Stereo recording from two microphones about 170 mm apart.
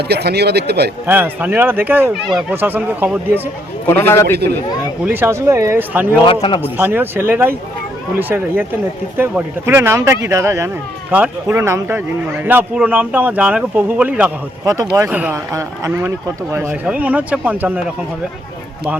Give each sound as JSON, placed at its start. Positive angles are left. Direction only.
{"t": 0.1, "sound": "speech", "side_deg": -75}
{"t": 1.0, "sound": "a man's voice", "side_deg": -10}
{"t": 3.8, "sound": "a man's voice", "side_deg": 15}
{"t": 5.0, "sound": "a man's voice", "side_deg": -15}
{"t": 6.2, "sound": "a man's voice", "side_deg": 30}
{"t": 6.6, "sound": "a man's voice", "side_deg": -10}
{"t": 14.6, "sound": "a man's voice", "side_deg": -20}